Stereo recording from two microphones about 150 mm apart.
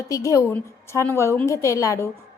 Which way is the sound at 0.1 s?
20° left (ahead or behind).